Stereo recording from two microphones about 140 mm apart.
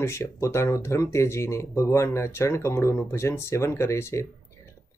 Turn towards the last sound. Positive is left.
turn(degrees=20)  # may be behind; listen again after turning